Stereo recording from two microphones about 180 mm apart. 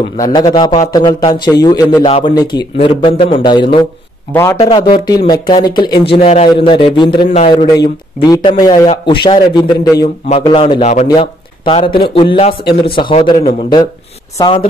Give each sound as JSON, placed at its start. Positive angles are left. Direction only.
{"t": 0.2, "sound": "a man's voice", "side_deg": 25}
{"t": 2.0, "sound": "a man's voice", "side_deg": 30}
{"t": 4.3, "sound": "a man's voice", "side_deg": 15}
{"t": 4.6, "sound": "a man's voice", "side_deg": 30}
{"t": 8.8, "sound": "a man's voice", "side_deg": 30}